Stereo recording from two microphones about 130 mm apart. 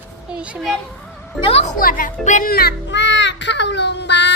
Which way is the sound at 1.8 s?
90° left.